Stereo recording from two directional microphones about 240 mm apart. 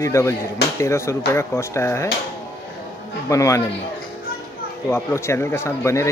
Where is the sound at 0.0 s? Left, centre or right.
Centre.